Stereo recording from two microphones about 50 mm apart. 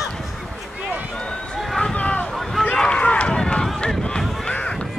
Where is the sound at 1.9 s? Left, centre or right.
Left.